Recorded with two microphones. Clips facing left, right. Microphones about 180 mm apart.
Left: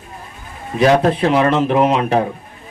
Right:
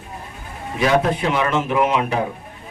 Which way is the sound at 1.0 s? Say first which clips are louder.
Left 6 dB; 35° left (ahead or behind).